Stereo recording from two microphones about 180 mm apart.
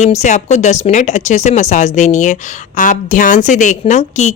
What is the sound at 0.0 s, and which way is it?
A woman's voice, 40° left (ahead or behind).